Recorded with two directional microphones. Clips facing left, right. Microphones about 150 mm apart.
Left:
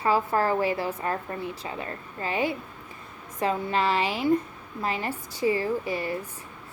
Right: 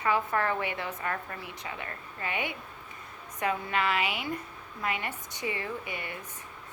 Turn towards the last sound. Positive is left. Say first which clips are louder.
# left 9 dB
turn(degrees=35)  # may be behind; listen again after turning